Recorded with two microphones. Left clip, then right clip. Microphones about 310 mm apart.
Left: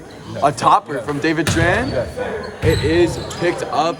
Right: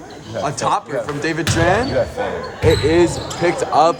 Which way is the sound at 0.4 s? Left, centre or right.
Centre.